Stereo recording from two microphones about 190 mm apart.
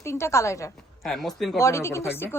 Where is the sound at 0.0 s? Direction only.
15° left (ahead or behind).